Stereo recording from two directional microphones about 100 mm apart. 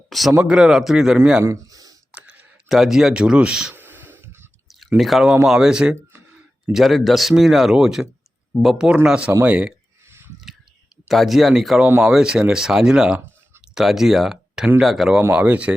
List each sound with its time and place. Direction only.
0.1 s speech: centre (ahead or behind)
1.5 s a sound: 35° right (ahead or behind)
2.1 s clicking: 15° right (ahead or behind)
2.6 s speech: centre (ahead or behind)
3.8 s a sound: 20° right (ahead or behind)
4.9 s speech: centre (ahead or behind)
10.1 s a sound: 25° right (ahead or behind)
11.1 s speech: centre (ahead or behind)
15.3 s speech: 15° right (ahead or behind)